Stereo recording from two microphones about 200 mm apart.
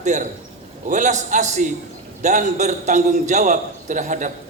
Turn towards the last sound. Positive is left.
turn(degrees=-40)  # may be behind; listen again after turning